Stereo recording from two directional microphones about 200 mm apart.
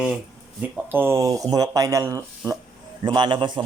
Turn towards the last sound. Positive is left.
turn(degrees=-25)  # may be behind; listen again after turning